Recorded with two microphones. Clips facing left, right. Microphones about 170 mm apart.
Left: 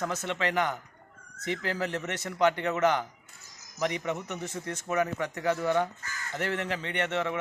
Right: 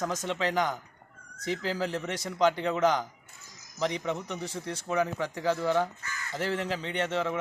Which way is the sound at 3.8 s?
5° left (ahead or behind).